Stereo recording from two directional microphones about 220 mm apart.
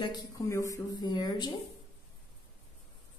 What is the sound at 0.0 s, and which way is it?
Speech, 20° left (ahead or behind).